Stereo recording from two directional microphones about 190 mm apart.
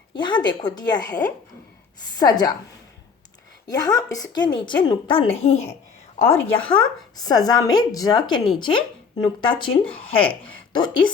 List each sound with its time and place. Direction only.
0.1 s a woman's voice: 25° left (ahead or behind)
2.1 s a woman's voice: 20° left (ahead or behind)
3.7 s a woman's voice: 20° left (ahead or behind)